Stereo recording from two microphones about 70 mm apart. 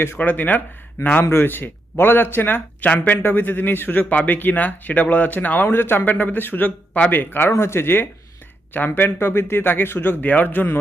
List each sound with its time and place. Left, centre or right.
0.2 s a man's voice: left